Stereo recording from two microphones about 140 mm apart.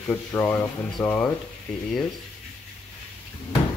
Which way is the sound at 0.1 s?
10° left (ahead or behind).